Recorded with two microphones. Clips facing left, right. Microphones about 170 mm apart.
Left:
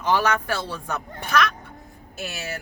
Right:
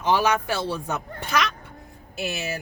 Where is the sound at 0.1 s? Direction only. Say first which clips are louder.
Right 1 dB; 15° right (ahead or behind).